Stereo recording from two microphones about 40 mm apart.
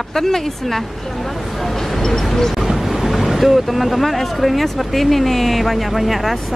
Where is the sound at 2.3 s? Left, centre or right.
Centre.